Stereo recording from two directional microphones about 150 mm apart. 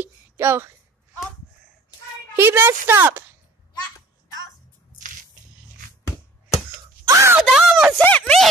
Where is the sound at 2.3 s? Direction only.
15° right (ahead or behind).